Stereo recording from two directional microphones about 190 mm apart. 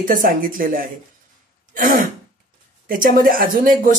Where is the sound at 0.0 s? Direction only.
45° right (ahead or behind).